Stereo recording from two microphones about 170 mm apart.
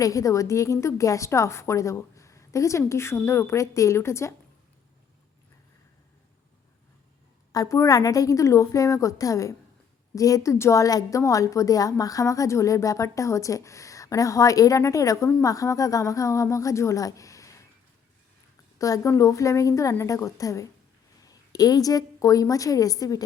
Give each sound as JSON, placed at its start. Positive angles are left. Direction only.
{"t": 0.0, "sound": "a woman's voice", "side_deg": 20}
{"t": 7.5, "sound": "a woman's voice", "side_deg": 20}
{"t": 18.8, "sound": "a woman's voice", "side_deg": 20}